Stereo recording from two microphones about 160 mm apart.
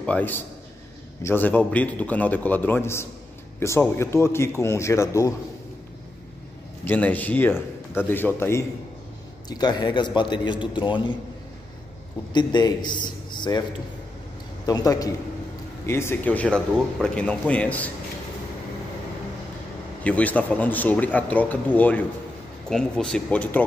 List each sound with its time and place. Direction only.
0.0 s a man's voice: 10° left (ahead or behind)
6.8 s a man's voice: 10° left (ahead or behind)
9.5 s a man's voice: 25° left (ahead or behind)
12.3 s a man's voice: 30° left (ahead or behind)
14.7 s a man's voice: 20° left (ahead or behind)
20.0 s a man's voice: 10° left (ahead or behind)